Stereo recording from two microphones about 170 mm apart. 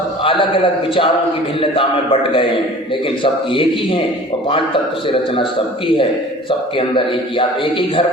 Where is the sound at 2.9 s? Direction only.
30° left (ahead or behind).